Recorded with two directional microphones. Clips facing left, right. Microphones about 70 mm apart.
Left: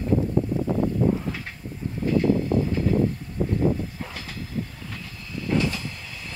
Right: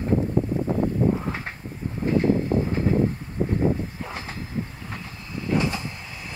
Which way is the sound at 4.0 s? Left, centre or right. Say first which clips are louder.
Right 2 dB; right.